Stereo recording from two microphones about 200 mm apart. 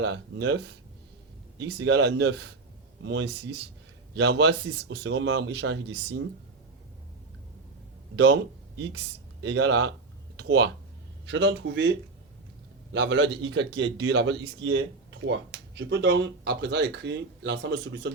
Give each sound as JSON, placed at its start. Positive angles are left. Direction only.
{"t": 0.0, "sound": "a man's voice", "side_deg": -65}
{"t": 1.6, "sound": "a man's voice", "side_deg": -65}
{"t": 8.1, "sound": "a man's voice", "side_deg": -65}